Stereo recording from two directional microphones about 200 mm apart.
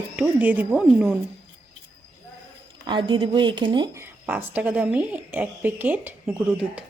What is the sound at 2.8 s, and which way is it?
A woman's voice, 25° right (ahead or behind).